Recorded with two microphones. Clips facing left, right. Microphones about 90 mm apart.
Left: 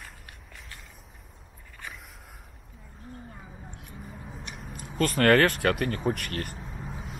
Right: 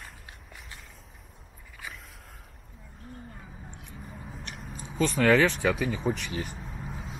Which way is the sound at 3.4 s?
5° left (ahead or behind).